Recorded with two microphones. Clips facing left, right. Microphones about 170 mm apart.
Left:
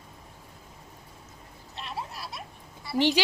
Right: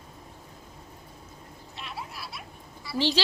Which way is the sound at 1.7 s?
35° left (ahead or behind).